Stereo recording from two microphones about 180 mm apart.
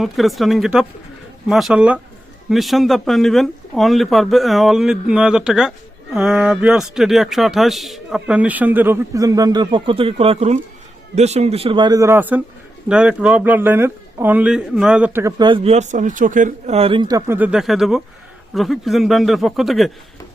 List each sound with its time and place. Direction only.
0.0 s speech: centre (ahead or behind)
15.4 s speech: 25° right (ahead or behind); by 19.9 s centre (ahead or behind)